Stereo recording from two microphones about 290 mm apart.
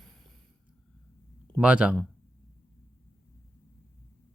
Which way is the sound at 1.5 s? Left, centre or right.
Centre.